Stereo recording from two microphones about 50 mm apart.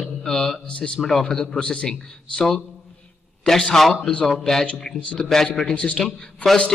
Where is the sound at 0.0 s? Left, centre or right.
Centre.